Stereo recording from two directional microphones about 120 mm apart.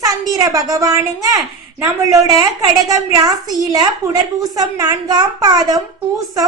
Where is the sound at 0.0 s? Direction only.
30° right (ahead or behind).